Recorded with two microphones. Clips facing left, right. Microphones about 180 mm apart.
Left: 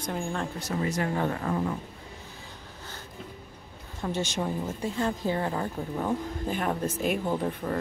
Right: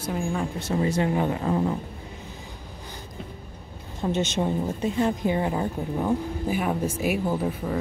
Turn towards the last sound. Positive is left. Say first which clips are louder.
# right 2 dB
turn(degrees=-5)  # may be behind; listen again after turning